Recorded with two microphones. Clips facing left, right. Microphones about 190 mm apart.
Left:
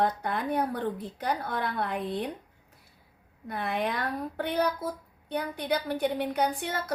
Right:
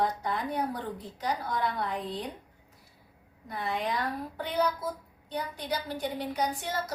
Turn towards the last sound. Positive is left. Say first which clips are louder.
# left 2 dB
turn(degrees=55)  # may be behind; listen again after turning